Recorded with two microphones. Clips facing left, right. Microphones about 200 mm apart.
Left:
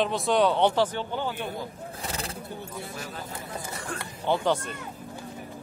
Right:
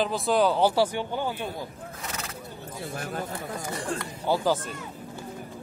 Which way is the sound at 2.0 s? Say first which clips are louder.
Left 3 dB; 30° left (ahead or behind).